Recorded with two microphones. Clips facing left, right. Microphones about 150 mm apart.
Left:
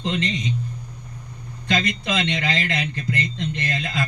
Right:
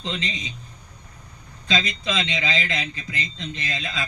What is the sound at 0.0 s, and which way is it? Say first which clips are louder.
Speech: left 6 dB; 65° left (ahead or behind).